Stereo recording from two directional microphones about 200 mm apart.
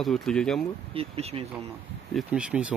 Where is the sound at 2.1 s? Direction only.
Centre (ahead or behind).